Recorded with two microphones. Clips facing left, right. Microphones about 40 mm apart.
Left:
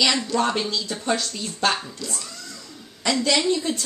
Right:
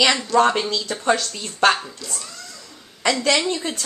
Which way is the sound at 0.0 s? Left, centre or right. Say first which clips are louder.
Right 3 dB; centre.